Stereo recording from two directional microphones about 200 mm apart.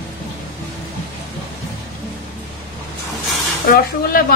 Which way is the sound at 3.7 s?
45° left (ahead or behind).